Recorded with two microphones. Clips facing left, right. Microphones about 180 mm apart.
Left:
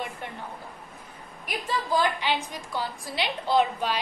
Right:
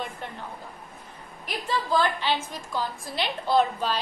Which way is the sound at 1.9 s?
15° left (ahead or behind).